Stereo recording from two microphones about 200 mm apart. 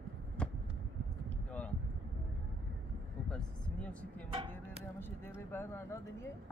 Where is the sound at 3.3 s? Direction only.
5° left (ahead or behind).